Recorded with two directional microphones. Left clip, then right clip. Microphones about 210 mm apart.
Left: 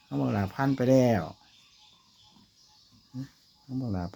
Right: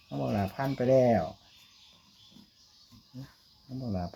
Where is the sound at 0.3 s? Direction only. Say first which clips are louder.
Left 2 dB; 50° left (ahead or behind).